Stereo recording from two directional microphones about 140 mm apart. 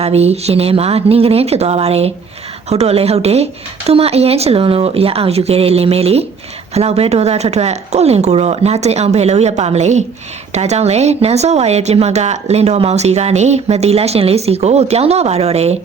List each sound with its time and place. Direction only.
0.0 s a woman's voice: 50° right (ahead or behind)